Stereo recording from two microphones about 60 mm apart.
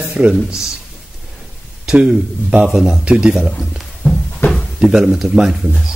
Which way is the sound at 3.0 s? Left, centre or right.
Centre.